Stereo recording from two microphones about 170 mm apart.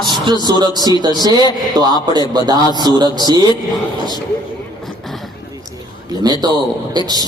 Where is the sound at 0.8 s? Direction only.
25° left (ahead or behind).